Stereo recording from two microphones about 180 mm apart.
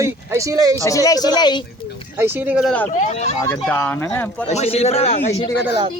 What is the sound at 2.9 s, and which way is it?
Speech, 40° left (ahead or behind).